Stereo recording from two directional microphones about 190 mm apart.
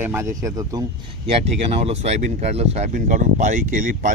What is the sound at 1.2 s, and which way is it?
Speech, 35° right (ahead or behind).